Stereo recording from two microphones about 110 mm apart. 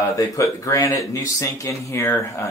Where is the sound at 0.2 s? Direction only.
30° left (ahead or behind).